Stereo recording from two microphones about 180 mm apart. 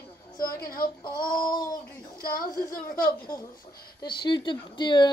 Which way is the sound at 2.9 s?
50° left (ahead or behind).